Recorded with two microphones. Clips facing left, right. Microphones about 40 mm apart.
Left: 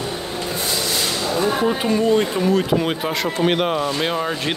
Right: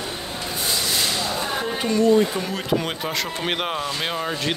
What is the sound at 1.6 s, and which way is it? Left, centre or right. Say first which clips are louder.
Speech: left 2 dB; centre.